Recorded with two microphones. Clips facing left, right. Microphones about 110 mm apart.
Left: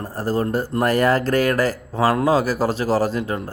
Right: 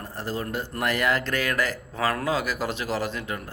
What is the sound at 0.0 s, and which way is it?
Speech, 40° left (ahead or behind).